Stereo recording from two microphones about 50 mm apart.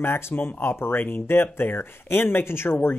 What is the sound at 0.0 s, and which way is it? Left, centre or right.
Speech, left.